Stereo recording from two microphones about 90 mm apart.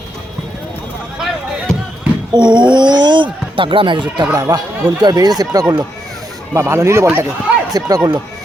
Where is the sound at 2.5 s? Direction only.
60° right (ahead or behind).